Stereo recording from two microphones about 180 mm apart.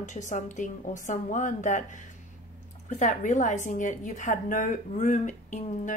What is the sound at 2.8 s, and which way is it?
A woman's voice, 40° left (ahead or behind).